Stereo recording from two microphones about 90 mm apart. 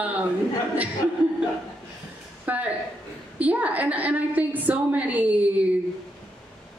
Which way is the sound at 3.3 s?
15° right (ahead or behind).